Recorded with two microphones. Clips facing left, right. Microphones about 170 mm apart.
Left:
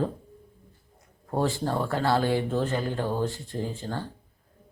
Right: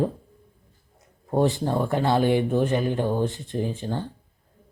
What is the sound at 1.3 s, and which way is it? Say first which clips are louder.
Speech: right 4 dB; 20° right (ahead or behind).